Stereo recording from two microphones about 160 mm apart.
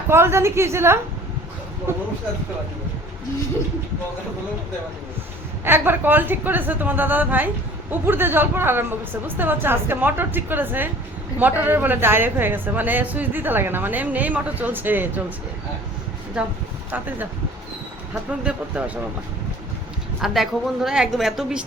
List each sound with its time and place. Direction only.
0.1 s a woman's voice: 15° right (ahead or behind)
5.6 s a woman's voice: 15° right (ahead or behind)
16.4 s a woman's voice: 5° right (ahead or behind)
20.2 s a woman's voice: centre (ahead or behind)